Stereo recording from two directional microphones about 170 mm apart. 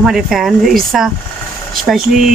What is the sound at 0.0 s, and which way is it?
Speech, centre (ahead or behind).